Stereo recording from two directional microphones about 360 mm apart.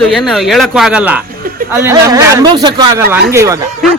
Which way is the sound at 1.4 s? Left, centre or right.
Right.